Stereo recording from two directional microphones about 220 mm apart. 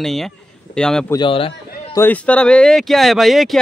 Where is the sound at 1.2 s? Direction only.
25° left (ahead or behind).